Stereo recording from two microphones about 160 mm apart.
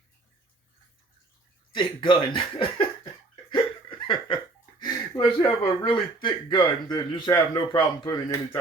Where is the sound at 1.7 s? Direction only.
30° left (ahead or behind).